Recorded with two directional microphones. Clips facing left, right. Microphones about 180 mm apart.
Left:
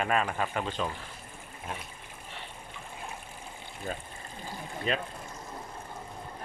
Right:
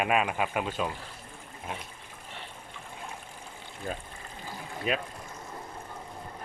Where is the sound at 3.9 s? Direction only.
Centre (ahead or behind).